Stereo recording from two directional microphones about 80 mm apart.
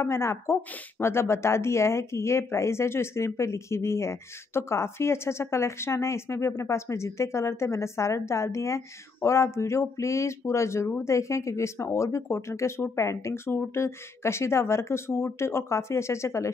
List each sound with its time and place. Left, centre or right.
0.0 s a woman's voice: left